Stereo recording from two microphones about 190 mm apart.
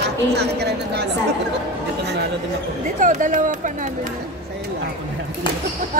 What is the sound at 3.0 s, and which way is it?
Speech, 45° right (ahead or behind).